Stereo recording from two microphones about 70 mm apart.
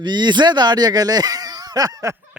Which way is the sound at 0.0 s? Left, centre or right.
Right.